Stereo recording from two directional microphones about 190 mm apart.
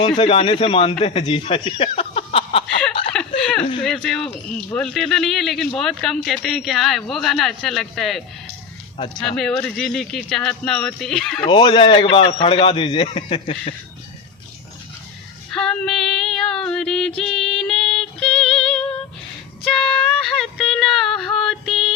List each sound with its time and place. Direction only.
0.2 s a man's voice: 30° left (ahead or behind)
3.1 s a sound: 5° left (ahead or behind)
3.8 s speech: 5° left (ahead or behind)
9.2 s speech: 5° left (ahead or behind)
11.4 s a man's voice: 25° left (ahead or behind)
15.5 s female singing: 5° left (ahead or behind)